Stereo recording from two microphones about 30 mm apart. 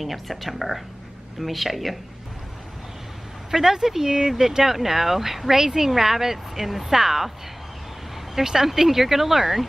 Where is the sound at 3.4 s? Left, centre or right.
Centre.